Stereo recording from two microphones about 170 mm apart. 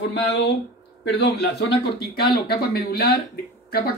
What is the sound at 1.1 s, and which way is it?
Speech, 80° left.